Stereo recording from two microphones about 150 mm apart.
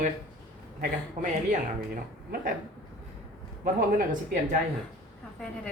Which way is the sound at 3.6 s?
65° right (ahead or behind).